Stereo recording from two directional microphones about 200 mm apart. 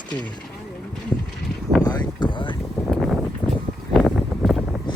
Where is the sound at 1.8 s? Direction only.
20° left (ahead or behind).